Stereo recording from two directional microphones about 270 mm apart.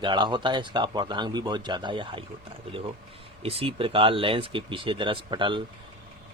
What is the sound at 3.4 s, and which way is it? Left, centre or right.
Speech, right.